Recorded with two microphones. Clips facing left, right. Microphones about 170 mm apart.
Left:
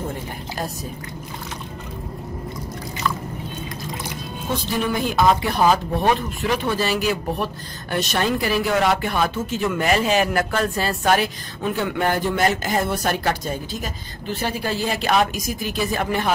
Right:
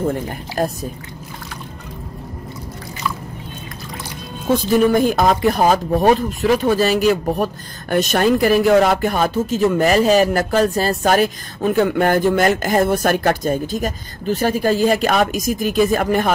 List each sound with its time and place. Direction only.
0.6 s speech: 50° right (ahead or behind)
4.9 s speech: 45° right (ahead or behind)